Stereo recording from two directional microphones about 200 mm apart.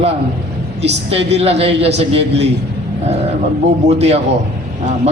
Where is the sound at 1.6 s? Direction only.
30° right (ahead or behind).